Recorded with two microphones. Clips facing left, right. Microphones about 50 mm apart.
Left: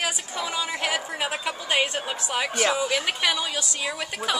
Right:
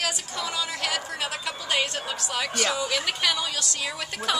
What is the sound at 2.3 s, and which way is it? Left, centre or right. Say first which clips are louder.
A woman's voice: left 3 dB; centre.